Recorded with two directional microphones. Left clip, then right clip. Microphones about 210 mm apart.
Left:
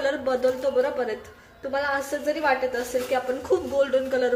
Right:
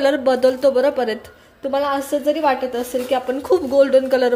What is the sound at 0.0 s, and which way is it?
Speech, 40° right (ahead or behind).